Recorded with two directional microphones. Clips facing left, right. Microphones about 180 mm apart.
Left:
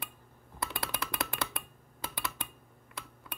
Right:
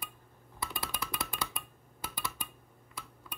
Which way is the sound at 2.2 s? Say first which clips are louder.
Left 1 dB; 65° left (ahead or behind).